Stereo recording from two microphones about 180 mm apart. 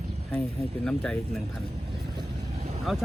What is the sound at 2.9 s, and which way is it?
Speech, centre (ahead or behind).